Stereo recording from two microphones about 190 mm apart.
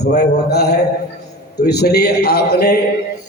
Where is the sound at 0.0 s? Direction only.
60° left (ahead or behind).